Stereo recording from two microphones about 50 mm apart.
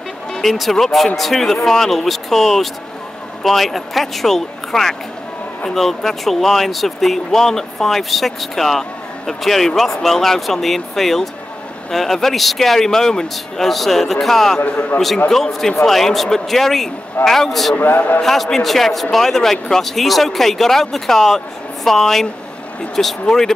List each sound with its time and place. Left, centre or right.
0.3 s speech: centre
14.6 s a man's voice: left
15.2 s speech: centre
17.9 s a man's voice: left
18.2 s speech: centre